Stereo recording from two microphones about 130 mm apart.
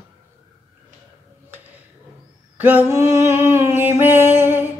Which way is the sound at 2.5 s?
15° right (ahead or behind).